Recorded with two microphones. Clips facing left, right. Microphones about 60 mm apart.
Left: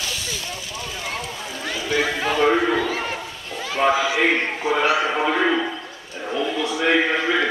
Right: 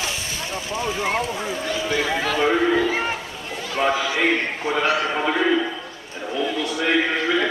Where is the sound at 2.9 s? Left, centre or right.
Right.